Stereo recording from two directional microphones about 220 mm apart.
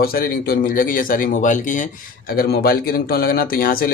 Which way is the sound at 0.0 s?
40° left (ahead or behind).